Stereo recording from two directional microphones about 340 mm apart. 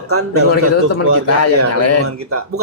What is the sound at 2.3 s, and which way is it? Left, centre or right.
Speech, right.